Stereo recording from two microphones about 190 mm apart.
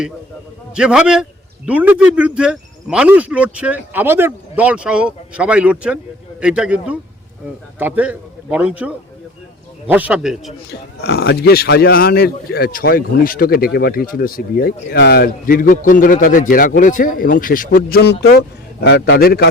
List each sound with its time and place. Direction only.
0.8 s a man's voice: 5° right (ahead or behind)
10.7 s a man's voice: 60° left (ahead or behind)